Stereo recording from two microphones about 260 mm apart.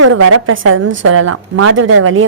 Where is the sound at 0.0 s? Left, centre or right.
Right.